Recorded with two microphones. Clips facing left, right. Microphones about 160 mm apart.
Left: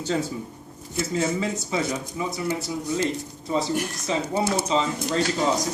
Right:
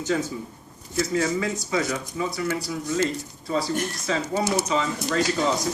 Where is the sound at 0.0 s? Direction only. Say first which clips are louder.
Even; 30° left (ahead or behind).